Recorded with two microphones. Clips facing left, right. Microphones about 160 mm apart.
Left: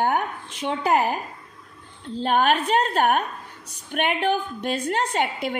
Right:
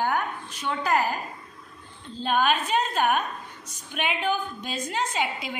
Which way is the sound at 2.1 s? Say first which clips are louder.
Left 3 dB; 65° left (ahead or behind).